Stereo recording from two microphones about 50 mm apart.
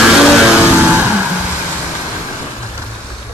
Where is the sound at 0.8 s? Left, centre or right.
Right.